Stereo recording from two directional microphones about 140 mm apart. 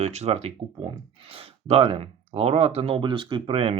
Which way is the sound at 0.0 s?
50° right (ahead or behind).